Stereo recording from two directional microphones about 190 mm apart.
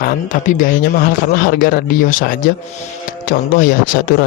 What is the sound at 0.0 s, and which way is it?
Speech, 45° left (ahead or behind).